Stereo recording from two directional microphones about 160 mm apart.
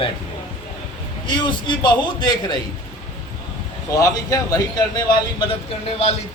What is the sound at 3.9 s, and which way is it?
Speech, 20° left (ahead or behind).